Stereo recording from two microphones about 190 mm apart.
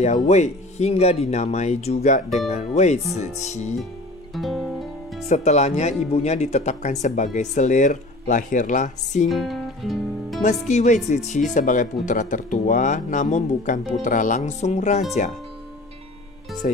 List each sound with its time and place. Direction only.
0.0 s speech: 35° left (ahead or behind)
4.3 s music: centre (ahead or behind)
5.3 s speech: 35° left (ahead or behind)
9.3 s music: centre (ahead or behind)
10.4 s speech: 40° left (ahead or behind)
16.6 s speech: 45° left (ahead or behind)